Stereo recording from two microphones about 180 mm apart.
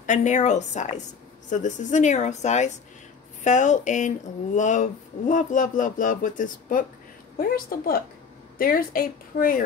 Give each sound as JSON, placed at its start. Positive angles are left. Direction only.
{"t": 0.0, "sound": "a woman's voice", "side_deg": 45}